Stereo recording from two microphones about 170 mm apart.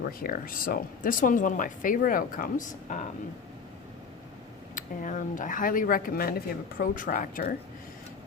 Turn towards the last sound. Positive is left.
turn(degrees=55)  # may be behind; listen again after turning